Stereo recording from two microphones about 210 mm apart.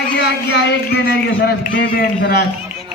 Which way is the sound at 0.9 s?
50° left (ahead or behind).